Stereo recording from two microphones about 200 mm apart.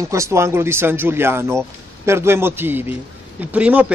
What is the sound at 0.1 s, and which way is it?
A man's voice, 15° right (ahead or behind).